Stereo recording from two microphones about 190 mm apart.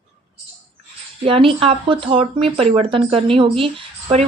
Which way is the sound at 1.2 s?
30° right (ahead or behind).